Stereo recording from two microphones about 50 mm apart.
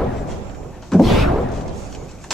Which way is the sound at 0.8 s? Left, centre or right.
Centre.